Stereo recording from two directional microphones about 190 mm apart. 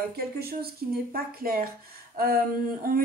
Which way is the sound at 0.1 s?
55° right (ahead or behind).